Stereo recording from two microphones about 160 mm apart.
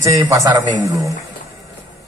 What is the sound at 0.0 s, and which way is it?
A man's voice, 20° right (ahead or behind).